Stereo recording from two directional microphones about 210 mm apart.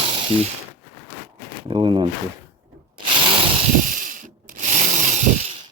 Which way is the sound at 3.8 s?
40° right (ahead or behind).